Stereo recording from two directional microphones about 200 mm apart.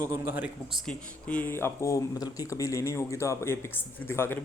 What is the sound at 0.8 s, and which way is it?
Speech, 5° left (ahead or behind).